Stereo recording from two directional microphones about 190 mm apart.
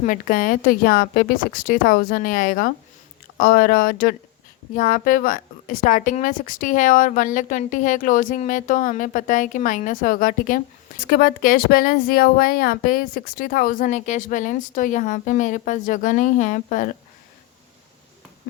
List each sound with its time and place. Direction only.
0.0 s speech: 45° left (ahead or behind)